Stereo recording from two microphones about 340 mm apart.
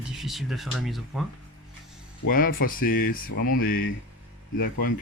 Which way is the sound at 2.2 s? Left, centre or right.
Left.